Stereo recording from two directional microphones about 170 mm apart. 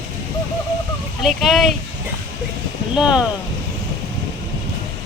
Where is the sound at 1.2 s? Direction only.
Centre (ahead or behind).